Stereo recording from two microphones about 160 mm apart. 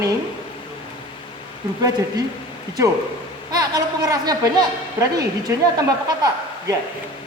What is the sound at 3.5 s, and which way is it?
A woman's voice, 25° right (ahead or behind).